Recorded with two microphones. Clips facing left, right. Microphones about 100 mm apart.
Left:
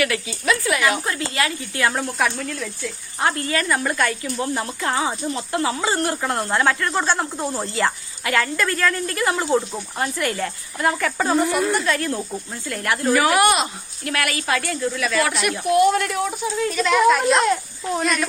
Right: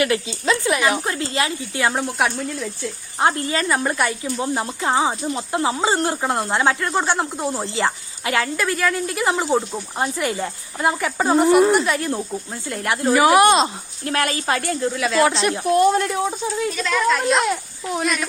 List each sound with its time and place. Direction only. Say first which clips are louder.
0.0 s speech: right 2 dB; 25° right (ahead or behind)
16.6 s a child's voice: left 5 dB; centre (ahead or behind)